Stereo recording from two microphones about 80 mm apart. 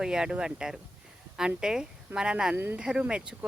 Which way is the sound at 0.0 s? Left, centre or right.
Centre.